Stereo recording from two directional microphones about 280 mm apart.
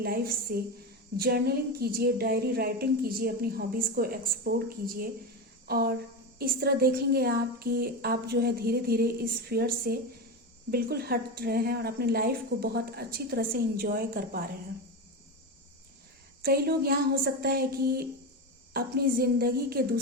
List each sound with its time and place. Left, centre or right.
0.0 s speech: right
5.6 s a sound: right
6.4 s speech: right
16.4 s speech: right